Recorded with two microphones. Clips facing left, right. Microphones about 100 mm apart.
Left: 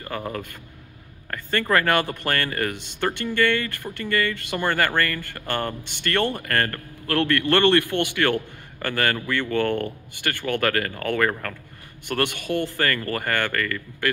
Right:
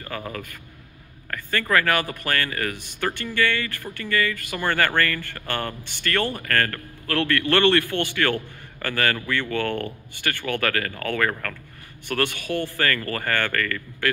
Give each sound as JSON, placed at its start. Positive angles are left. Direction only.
{"t": 0.0, "sound": "speech", "side_deg": 25}